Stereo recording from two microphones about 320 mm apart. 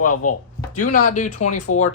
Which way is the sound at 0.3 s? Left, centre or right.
Left.